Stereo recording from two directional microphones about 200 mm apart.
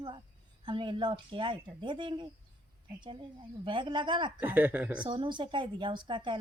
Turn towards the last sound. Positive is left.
turn(degrees=-25)  # may be behind; listen again after turning